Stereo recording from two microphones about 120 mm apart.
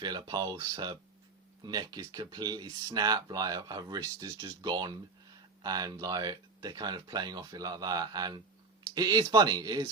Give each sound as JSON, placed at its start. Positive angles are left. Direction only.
{"t": 0.0, "sound": "speech", "side_deg": -35}